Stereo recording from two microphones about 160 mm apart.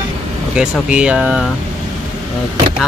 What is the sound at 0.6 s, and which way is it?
Speech, 5° right (ahead or behind).